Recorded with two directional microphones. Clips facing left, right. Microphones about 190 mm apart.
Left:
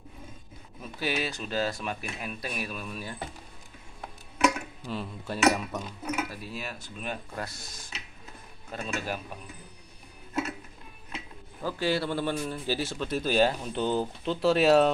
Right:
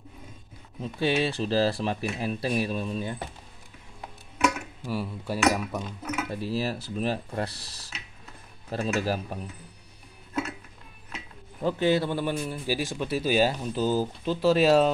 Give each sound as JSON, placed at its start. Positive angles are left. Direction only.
{"t": 0.7, "sound": "speech", "side_deg": -25}
{"t": 4.4, "sound": "dishes", "side_deg": -10}
{"t": 5.4, "sound": "a man's voice", "side_deg": -10}
{"t": 6.2, "sound": "speech", "side_deg": -25}
{"t": 11.6, "sound": "a man's voice", "side_deg": -20}